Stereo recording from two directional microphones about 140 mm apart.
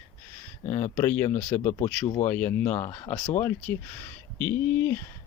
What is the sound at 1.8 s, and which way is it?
Speech, 50° left (ahead or behind).